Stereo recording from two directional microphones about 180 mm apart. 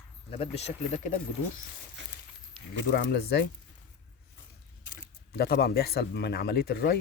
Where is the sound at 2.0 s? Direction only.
80° right.